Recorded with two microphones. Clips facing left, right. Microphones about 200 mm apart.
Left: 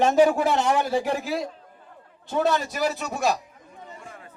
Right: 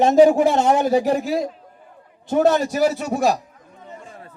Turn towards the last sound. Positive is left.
turn(degrees=-45)  # may be behind; listen again after turning